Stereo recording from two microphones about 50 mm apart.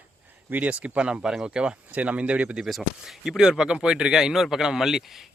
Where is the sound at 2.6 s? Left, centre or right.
Centre.